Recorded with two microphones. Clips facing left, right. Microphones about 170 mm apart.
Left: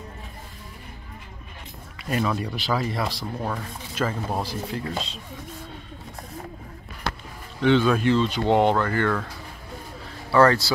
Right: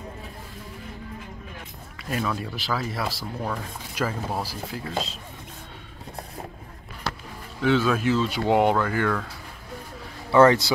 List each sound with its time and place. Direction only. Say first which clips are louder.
2.0 s speech: left 3 dB; centre (ahead or behind)
7.6 s speech: left 2 dB; 5° right (ahead or behind)
10.3 s speech: right 2 dB; 20° right (ahead or behind)